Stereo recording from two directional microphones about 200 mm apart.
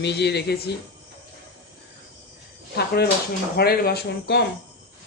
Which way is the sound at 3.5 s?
50° left (ahead or behind).